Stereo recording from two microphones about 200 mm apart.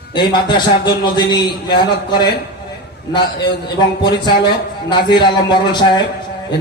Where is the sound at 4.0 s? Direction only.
20° left (ahead or behind).